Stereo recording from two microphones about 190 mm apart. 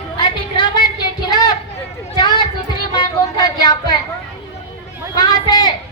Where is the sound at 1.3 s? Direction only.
20° left (ahead or behind).